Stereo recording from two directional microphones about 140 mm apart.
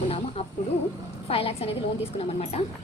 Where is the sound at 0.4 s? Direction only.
45° left (ahead or behind).